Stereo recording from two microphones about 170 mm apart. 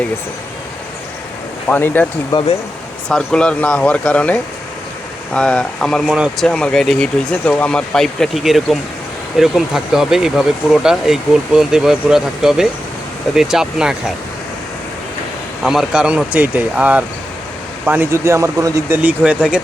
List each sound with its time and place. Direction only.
1.6 s speech: 10° left (ahead or behind)
2.3 s speech: 20° left (ahead or behind)
3.1 s speech: 5° left (ahead or behind)
15.6 s speech: 5° right (ahead or behind)